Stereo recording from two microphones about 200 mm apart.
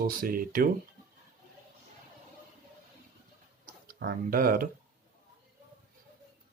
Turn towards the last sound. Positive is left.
turn(degrees=-45)  # may be behind; listen again after turning